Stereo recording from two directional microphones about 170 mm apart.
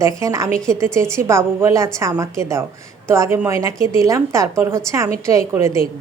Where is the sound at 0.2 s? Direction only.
20° right (ahead or behind).